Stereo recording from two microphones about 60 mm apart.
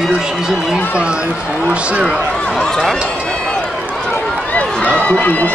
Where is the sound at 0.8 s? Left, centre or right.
Left.